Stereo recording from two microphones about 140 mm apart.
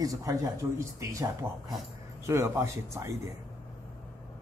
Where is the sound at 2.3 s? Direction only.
20° right (ahead or behind).